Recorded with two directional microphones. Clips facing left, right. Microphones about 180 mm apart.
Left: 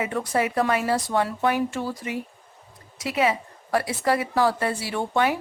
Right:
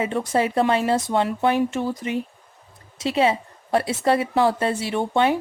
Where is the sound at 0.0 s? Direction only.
25° right (ahead or behind).